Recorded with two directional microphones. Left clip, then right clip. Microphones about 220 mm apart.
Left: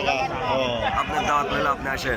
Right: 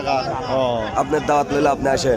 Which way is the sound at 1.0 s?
40° right (ahead or behind).